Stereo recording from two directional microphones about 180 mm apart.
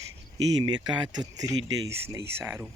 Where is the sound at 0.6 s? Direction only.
20° right (ahead or behind).